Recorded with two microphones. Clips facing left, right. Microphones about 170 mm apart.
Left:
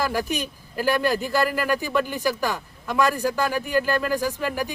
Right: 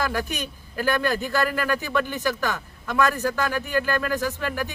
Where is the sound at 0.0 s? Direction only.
10° left (ahead or behind).